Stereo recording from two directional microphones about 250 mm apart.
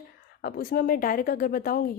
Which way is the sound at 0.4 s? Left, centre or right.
Left.